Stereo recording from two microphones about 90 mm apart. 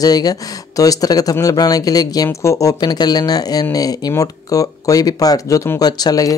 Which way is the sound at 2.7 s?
50° left (ahead or behind).